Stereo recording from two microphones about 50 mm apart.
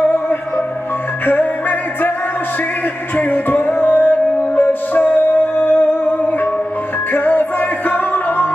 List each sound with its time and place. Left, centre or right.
1.2 s music: left
3.2 s music: left
7.2 s music: left